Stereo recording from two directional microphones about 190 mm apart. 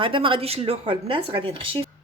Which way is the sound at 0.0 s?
25° right (ahead or behind).